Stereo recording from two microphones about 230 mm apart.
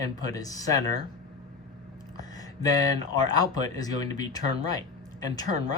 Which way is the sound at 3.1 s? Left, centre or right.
Centre.